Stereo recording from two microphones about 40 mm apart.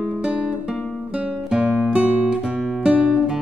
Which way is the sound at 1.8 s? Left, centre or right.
Right.